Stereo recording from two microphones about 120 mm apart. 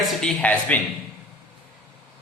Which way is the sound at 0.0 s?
5° left (ahead or behind).